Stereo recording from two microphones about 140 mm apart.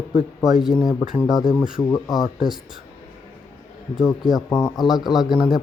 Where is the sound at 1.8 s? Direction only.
25° left (ahead or behind).